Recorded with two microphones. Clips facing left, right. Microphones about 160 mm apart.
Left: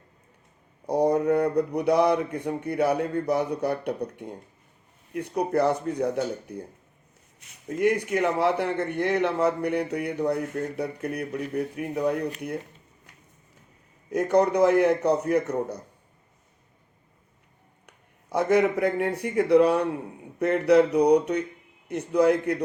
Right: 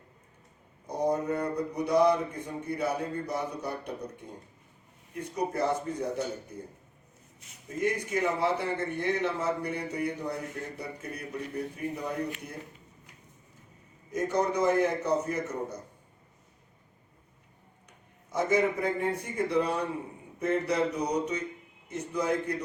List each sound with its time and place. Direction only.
0.9 s speech: 65° left (ahead or behind)
14.1 s speech: 65° left (ahead or behind)
17.8 s speech: 65° left (ahead or behind)